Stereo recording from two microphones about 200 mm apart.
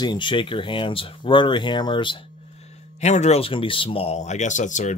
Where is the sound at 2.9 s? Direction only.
35° left (ahead or behind).